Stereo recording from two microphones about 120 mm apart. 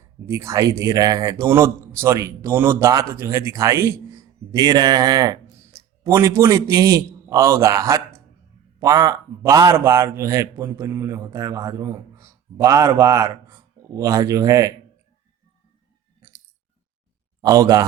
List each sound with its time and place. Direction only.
0.3 s a man's voice: 25° right (ahead or behind)
17.4 s a man's voice: 30° right (ahead or behind)